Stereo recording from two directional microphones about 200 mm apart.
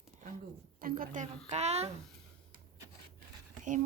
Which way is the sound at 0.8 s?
45° right (ahead or behind).